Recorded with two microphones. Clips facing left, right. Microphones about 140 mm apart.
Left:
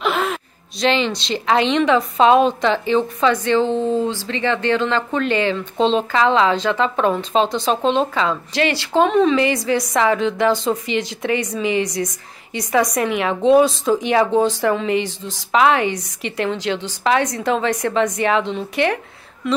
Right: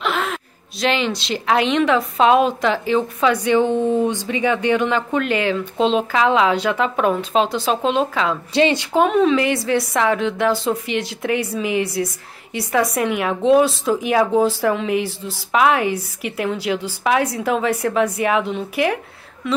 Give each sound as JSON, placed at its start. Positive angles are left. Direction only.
{"t": 0.0, "sound": "a woman's voice", "side_deg": 0}
{"t": 8.5, "sound": "a woman's voice", "side_deg": -25}
{"t": 8.9, "sound": "a woman's voice", "side_deg": -5}